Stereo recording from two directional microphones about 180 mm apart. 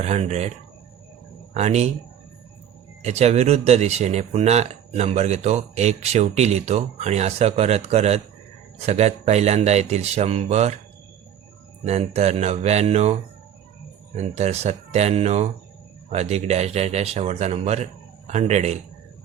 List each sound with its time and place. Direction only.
0.0 s speech: 40° right (ahead or behind)
1.5 s speech: 35° right (ahead or behind)
3.0 s speech: 35° right (ahead or behind)
11.9 s speech: 35° right (ahead or behind)
14.2 s speech: 40° right (ahead or behind)